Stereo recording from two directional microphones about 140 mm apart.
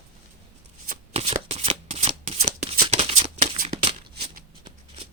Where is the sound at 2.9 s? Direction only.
50° right (ahead or behind).